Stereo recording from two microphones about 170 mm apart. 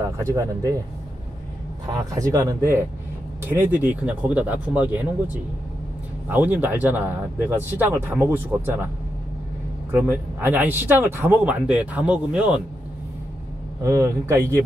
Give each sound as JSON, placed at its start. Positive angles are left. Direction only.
{"t": 0.2, "sound": "speech", "side_deg": -20}
{"t": 2.1, "sound": "speech", "side_deg": -20}
{"t": 9.8, "sound": "speech", "side_deg": -15}
{"t": 13.8, "sound": "speech", "side_deg": -15}